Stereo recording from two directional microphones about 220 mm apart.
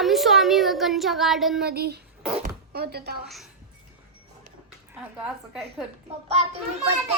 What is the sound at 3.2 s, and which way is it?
Speech, centre (ahead or behind).